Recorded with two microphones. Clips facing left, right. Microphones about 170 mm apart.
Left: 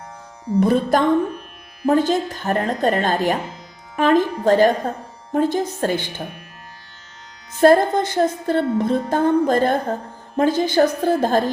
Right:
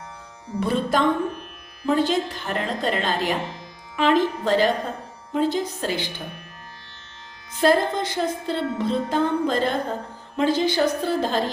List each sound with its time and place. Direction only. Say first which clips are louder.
0.6 s music: left 4 dB; 45° left (ahead or behind)
7.6 s music: left 6 dB; 50° left (ahead or behind)